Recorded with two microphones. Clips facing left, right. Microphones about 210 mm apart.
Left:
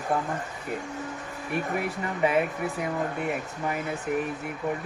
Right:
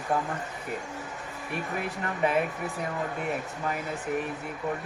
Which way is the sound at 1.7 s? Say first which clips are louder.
Left 3 dB; 20° left (ahead or behind).